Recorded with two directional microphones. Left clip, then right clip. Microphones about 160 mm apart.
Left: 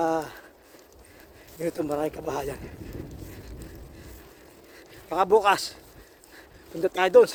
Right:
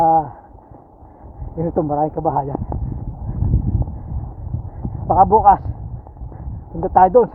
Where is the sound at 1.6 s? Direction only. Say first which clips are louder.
Right 9 dB; 40° left (ahead or behind).